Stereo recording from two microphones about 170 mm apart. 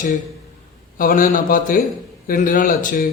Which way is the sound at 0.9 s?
55° left (ahead or behind).